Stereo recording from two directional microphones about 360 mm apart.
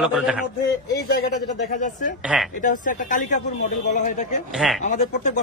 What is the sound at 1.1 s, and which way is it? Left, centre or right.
Speech, left.